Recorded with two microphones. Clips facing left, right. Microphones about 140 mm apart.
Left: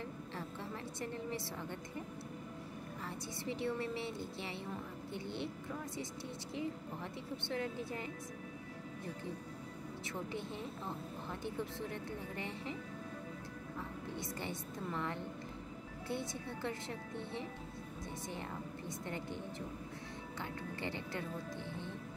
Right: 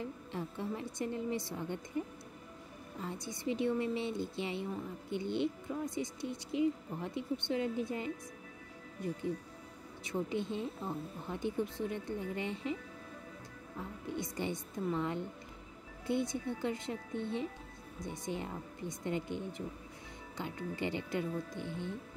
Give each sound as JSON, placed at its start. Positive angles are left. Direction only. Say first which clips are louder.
{"t": 0.3, "sound": "a sound", "louder": "right 5 dB", "side_deg": -15}
{"t": 3.0, "sound": "speech", "louder": "right 6 dB", "side_deg": -20}
{"t": 10.0, "sound": "speech", "louder": "right 8 dB", "side_deg": -20}
{"t": 14.1, "sound": "speech", "louder": "right 7 dB", "side_deg": -15}